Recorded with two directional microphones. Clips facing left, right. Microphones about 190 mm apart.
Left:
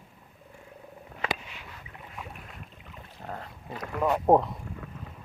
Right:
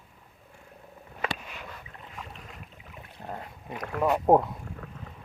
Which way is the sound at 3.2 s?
15° right (ahead or behind).